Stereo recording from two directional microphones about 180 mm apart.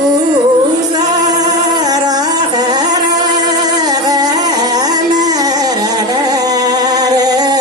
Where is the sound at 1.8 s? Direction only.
20° right (ahead or behind).